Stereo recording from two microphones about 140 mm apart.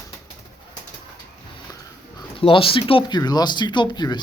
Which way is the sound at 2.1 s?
40° left (ahead or behind).